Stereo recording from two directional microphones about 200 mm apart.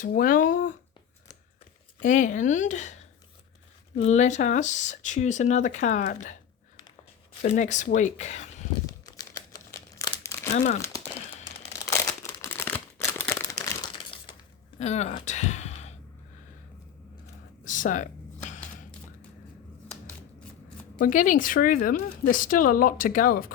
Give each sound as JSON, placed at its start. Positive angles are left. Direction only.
{"t": 0.0, "sound": "speech", "side_deg": 45}
{"t": 2.0, "sound": "speech", "side_deg": 40}
{"t": 7.4, "sound": "speech", "side_deg": 40}
{"t": 8.9, "sound": "crumpling", "side_deg": 20}
{"t": 10.5, "sound": "speech", "side_deg": 35}
{"t": 11.9, "sound": "crumpling", "side_deg": 15}
{"t": 14.8, "sound": "speech", "side_deg": 35}
{"t": 17.7, "sound": "a sound", "side_deg": 40}
{"t": 21.0, "sound": "speech", "side_deg": 40}